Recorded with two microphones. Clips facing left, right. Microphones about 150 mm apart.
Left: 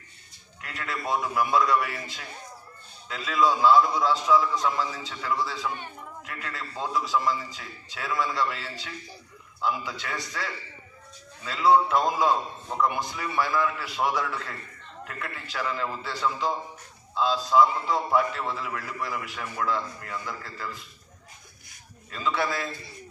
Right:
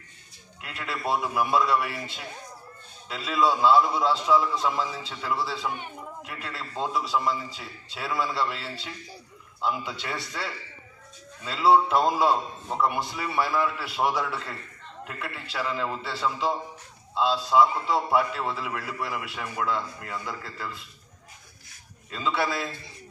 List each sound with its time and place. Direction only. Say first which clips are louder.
0.6 s a man's voice: right 1 dB; 5° right (ahead or behind)
3.1 s a man's voice: even; centre (ahead or behind)
5.7 s a sound: right 1 dB; 15° right (ahead or behind)
6.3 s a man's voice: right 1 dB; 5° right (ahead or behind)
22.1 s a man's voice: right 1 dB; centre (ahead or behind)